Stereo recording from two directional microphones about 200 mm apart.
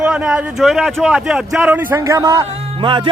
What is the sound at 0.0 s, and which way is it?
A man's voice, 5° right (ahead or behind).